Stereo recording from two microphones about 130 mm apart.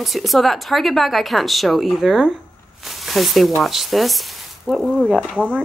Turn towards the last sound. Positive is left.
turn(degrees=-10)  # may be behind; listen again after turning